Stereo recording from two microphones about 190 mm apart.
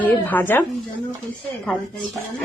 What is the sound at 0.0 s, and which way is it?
Speech, 10° left (ahead or behind).